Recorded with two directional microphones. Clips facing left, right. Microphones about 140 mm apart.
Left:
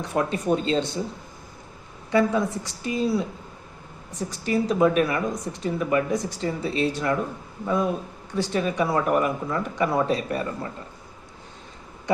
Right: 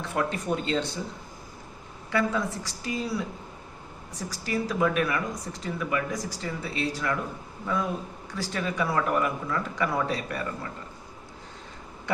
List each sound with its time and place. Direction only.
0.0 s speech: 20° left (ahead or behind)
2.0 s speech: 20° left (ahead or behind)